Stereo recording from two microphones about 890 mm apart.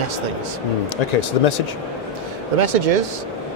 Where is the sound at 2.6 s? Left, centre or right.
Right.